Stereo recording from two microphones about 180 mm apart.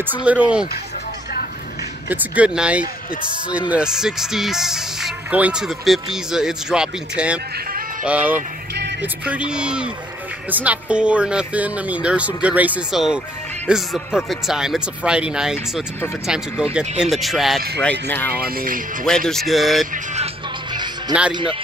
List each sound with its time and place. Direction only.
0.2 s speech: 5° right (ahead or behind)
2.0 s speech: 5° right (ahead or behind)
18.0 s speech: 10° left (ahead or behind)
18.4 s speech: 50° right (ahead or behind)
19.0 s speech: 5° left (ahead or behind)
21.3 s a man's voice: 25° right (ahead or behind)